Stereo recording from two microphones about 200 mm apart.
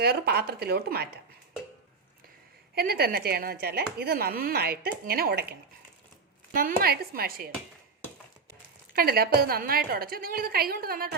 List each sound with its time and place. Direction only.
0.0 s speech: 55° right (ahead or behind)
2.7 s speech: 50° right (ahead or behind)
9.0 s speech: 50° right (ahead or behind)